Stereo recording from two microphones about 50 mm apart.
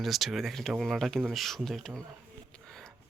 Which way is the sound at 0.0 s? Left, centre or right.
Centre.